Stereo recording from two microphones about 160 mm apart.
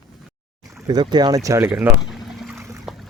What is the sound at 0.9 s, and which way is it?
Speech, 25° right (ahead or behind).